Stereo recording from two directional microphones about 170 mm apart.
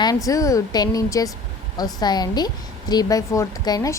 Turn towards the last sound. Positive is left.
turn(degrees=20)  # may be behind; listen again after turning